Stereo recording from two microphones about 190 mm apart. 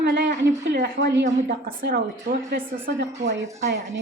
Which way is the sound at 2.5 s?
60° right (ahead or behind).